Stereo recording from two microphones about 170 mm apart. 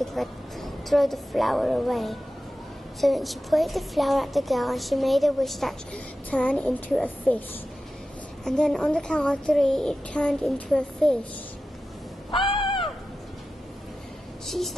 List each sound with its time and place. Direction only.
0.0 s a woman's voice: centre (ahead or behind)
8.5 s a woman's voice: 5° left (ahead or behind)
12.3 s crow: 30° left (ahead or behind)
14.5 s speech: centre (ahead or behind)